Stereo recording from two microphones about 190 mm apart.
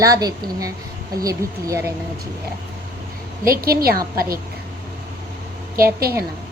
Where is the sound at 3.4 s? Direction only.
50° right (ahead or behind).